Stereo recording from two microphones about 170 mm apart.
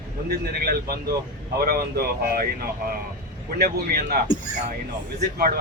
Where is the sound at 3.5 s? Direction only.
65° right (ahead or behind).